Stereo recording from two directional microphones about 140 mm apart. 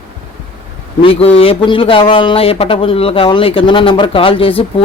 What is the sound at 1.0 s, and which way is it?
Speech, 40° left (ahead or behind).